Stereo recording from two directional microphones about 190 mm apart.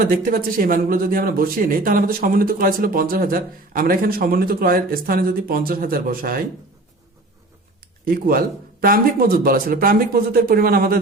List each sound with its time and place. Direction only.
0.0 s speech: 50° right (ahead or behind)
8.0 s speech: 50° right (ahead or behind)